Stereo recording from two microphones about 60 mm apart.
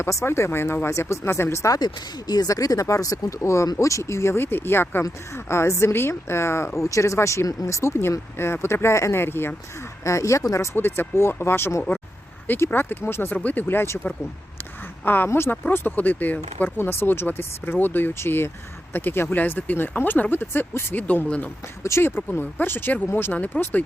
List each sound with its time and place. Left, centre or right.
0.0 s a woman's voice: left
2.3 s speech: left
5.5 s a woman's voice: left
6.7 s a woman's voice: left
9.2 s speech: left
10.0 s speech: left
10.8 s a woman's voice: left
13.3 s speech: left
15.0 s speech: left
21.2 s speech: centre
21.8 s speech: left